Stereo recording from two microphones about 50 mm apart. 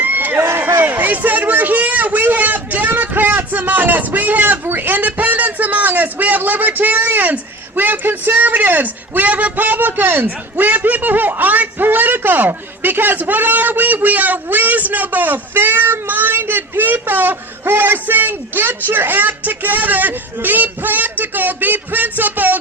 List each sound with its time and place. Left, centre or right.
0.0 s run: right
0.3 s a sound: right
0.9 s a man's voice: right